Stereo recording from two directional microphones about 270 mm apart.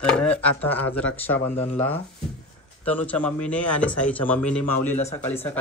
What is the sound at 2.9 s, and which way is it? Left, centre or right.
Speech, centre.